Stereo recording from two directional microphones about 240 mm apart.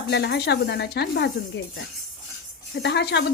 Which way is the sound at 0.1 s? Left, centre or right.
Left.